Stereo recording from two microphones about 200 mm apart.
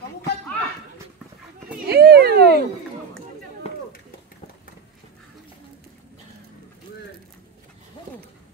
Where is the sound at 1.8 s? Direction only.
50° right (ahead or behind).